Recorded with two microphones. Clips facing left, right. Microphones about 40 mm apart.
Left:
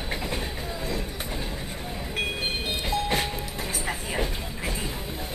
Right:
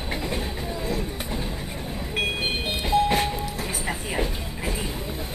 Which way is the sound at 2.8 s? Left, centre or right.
Centre.